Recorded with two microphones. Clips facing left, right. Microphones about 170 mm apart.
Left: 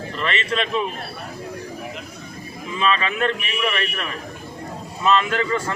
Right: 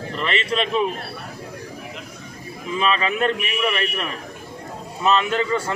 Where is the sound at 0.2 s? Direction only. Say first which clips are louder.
Right 1 dB; 35° right (ahead or behind).